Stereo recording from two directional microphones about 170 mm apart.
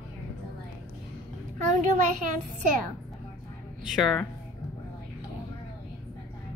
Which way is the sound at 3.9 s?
Centre (ahead or behind).